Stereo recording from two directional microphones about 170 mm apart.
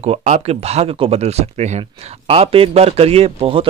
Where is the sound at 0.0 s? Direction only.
40° right (ahead or behind).